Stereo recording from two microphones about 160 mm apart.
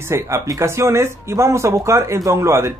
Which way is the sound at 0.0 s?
15° right (ahead or behind).